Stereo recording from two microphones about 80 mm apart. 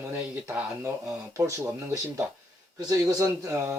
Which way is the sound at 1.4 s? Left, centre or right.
Right.